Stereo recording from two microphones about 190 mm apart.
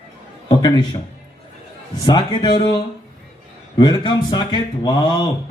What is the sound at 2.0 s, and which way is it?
Speech, 25° left (ahead or behind).